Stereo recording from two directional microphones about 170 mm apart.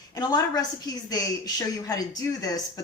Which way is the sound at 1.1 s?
20° left (ahead or behind).